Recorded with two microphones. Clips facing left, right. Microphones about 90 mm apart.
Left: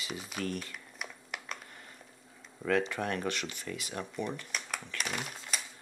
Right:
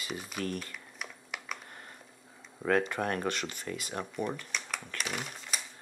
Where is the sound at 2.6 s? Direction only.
45° right (ahead or behind).